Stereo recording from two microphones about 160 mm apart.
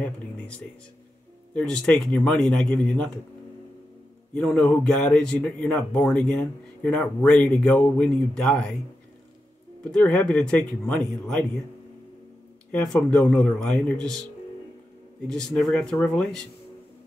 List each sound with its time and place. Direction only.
1.5 s speech: 5° left (ahead or behind)
4.3 s speech: 5° left (ahead or behind)
9.9 s speech: 5° left (ahead or behind)
12.7 s speech: 5° left (ahead or behind)
15.2 s speech: 5° left (ahead or behind)